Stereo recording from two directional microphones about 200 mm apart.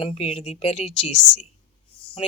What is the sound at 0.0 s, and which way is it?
Speech, 30° left (ahead or behind).